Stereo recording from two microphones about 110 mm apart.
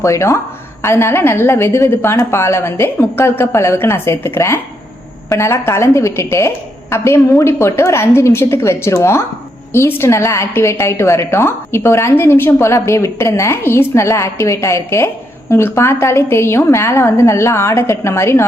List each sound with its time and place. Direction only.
0.0 s a woman's voice: 25° left (ahead or behind)